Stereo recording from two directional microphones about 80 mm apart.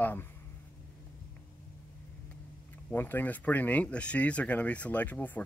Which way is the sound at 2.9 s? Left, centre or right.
Left.